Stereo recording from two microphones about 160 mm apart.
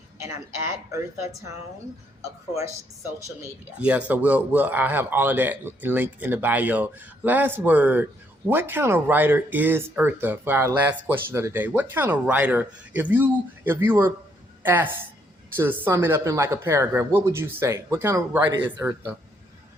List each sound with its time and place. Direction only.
0.9 s speech: 20° right (ahead or behind)
3.2 s speech: 20° right (ahead or behind)
3.8 s a woman's voice: 10° right (ahead or behind)